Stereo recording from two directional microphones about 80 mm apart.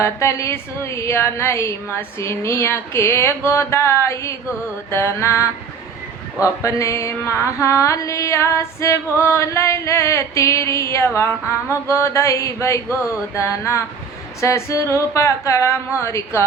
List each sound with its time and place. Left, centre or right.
0.0 s mantra: left